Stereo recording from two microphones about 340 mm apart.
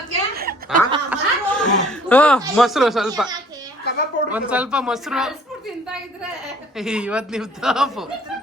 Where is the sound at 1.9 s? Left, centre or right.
Centre.